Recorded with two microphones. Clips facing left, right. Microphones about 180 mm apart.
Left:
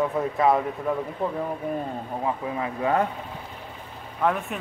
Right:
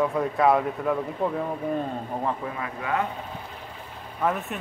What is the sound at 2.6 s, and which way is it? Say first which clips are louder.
Speech: left 6 dB; 30° left (ahead or behind).